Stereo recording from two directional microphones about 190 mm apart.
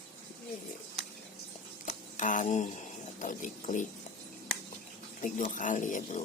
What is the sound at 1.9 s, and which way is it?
Camera, 40° left (ahead or behind).